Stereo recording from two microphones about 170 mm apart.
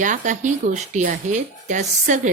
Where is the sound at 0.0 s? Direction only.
50° right (ahead or behind).